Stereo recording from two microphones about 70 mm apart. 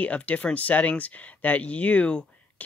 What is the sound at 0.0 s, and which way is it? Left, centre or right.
Speech, left.